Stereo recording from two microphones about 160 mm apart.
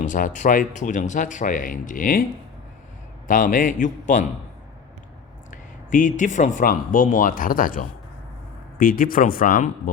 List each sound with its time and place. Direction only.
0.0 s speech: 50° left (ahead or behind)
3.2 s speech: 55° left (ahead or behind)
5.5 s speech: 55° left (ahead or behind)